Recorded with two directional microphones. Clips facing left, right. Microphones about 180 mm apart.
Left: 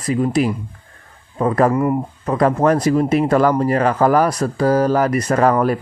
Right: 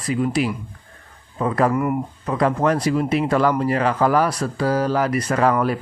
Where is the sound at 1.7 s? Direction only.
30° left (ahead or behind).